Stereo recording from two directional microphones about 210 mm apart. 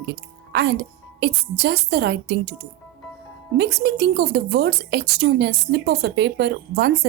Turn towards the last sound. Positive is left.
turn(degrees=-50)  # may be behind; listen again after turning